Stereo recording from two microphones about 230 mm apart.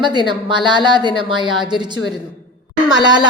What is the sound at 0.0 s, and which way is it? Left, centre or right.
A woman's voice, centre.